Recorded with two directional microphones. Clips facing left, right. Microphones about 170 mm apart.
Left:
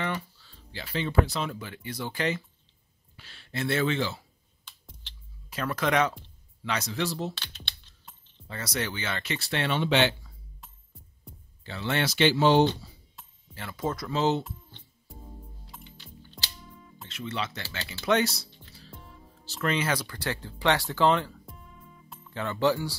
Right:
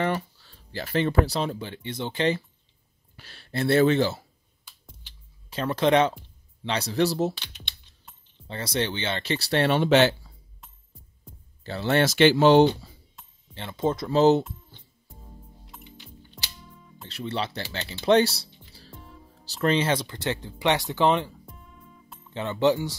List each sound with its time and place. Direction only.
0.0 s speech: 40° right (ahead or behind)
3.2 s speech: 40° right (ahead or behind)
5.5 s speech: 25° right (ahead or behind)
7.3 s speech: 15° right (ahead or behind)
8.5 s speech: 30° right (ahead or behind); by 10.1 s 45° right (ahead or behind)
11.6 s speech: 40° right (ahead or behind)
13.6 s speech: 25° right (ahead or behind)
16.5 s music: centre (ahead or behind)
17.1 s speech: 35° right (ahead or behind)
18.9 s music: centre (ahead or behind)
19.4 s speech: 30° right (ahead or behind)
21.5 s music: centre (ahead or behind)
22.3 s speech: 20° right (ahead or behind)